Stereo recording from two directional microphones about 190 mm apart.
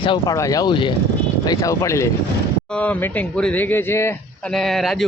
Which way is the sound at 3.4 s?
10° left (ahead or behind).